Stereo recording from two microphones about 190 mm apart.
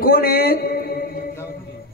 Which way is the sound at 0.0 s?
50° left (ahead or behind).